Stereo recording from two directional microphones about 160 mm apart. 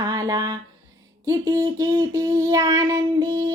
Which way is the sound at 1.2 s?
20° right (ahead or behind).